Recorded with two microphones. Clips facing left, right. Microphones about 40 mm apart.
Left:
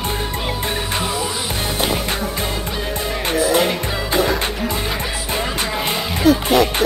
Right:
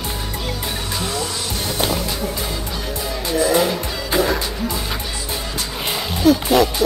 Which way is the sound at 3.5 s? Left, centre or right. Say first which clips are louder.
Left 1 dB; left.